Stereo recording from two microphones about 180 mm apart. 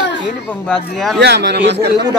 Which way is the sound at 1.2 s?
70° right (ahead or behind).